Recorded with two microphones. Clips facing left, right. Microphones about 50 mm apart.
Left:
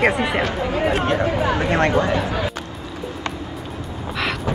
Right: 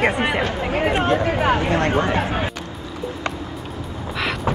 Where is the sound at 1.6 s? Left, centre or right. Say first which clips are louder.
Left 1 dB; left.